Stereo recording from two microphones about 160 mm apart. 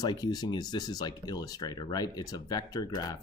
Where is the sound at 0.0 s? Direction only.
25° left (ahead or behind).